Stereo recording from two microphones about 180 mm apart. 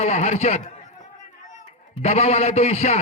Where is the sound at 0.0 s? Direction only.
40° left (ahead or behind).